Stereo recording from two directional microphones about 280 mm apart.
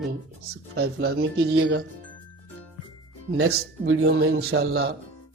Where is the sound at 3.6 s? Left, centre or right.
Right.